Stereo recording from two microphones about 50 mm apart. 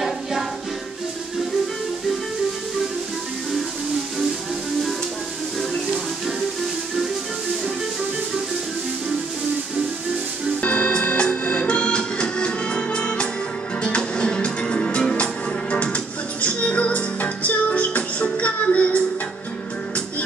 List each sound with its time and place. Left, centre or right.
10.6 s music: left